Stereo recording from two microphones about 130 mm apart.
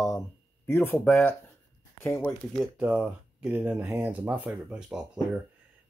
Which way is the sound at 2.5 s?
Centre (ahead or behind).